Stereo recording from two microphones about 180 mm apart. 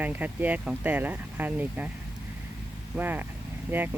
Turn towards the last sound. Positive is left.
turn(degrees=-10)  # may be behind; listen again after turning